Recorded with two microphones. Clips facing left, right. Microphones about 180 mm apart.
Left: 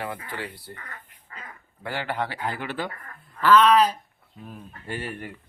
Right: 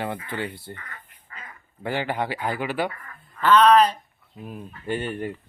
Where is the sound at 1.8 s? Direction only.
15° right (ahead or behind).